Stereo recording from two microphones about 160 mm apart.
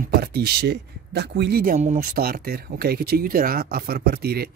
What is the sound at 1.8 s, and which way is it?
Speech, 45° right (ahead or behind).